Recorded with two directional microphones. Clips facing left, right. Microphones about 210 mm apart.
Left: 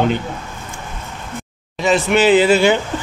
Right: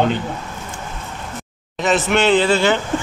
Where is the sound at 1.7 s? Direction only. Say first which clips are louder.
Left 2 dB; centre (ahead or behind).